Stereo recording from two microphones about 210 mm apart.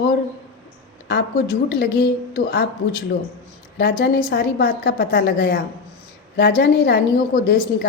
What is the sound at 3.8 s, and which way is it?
A woman's voice, 45° left (ahead or behind).